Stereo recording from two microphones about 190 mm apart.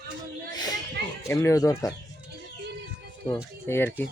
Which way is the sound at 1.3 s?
15° left (ahead or behind).